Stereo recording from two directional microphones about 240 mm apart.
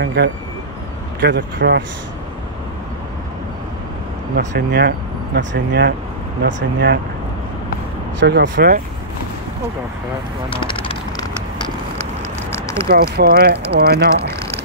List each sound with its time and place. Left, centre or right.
0.0 s speech: right
4.4 s speech: right
8.2 s speech: right
10.5 s a sound: left
12.0 s vehicle: centre
12.8 s speech: right